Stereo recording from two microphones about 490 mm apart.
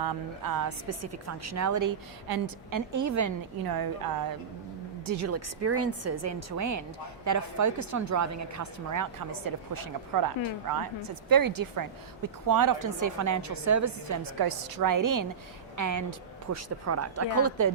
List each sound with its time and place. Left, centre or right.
0.0 s speech: right
5.0 s a woman's voice: right